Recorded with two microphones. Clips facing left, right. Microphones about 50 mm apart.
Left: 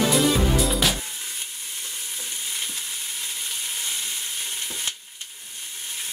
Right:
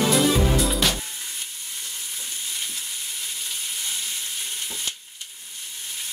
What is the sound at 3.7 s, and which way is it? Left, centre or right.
Frying, left.